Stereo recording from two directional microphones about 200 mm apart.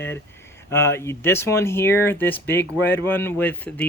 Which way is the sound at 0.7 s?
10° left (ahead or behind).